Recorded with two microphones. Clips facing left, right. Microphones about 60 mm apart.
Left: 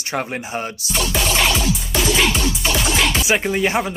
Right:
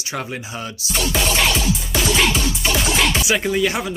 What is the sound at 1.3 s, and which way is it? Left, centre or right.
Music, centre.